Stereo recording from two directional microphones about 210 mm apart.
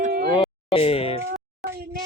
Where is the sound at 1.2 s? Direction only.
50° right (ahead or behind).